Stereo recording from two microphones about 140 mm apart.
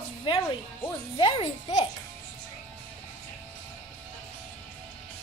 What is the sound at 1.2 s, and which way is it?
Speech, 35° left (ahead or behind).